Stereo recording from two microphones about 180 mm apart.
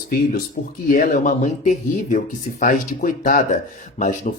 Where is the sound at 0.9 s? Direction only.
50° left (ahead or behind).